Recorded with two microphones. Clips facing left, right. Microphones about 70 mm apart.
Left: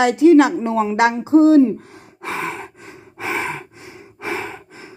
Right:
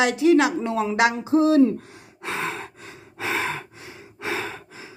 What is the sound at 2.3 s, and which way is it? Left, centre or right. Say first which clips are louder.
Gasp: left 2 dB; centre.